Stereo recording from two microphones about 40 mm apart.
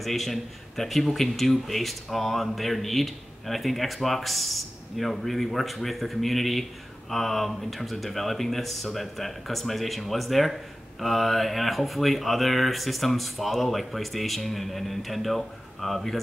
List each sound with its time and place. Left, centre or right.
0.0 s speech: centre